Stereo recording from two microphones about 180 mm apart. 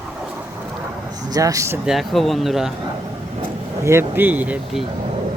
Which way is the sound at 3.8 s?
15° right (ahead or behind).